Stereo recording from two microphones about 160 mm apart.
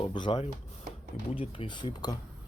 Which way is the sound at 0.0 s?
30° left (ahead or behind).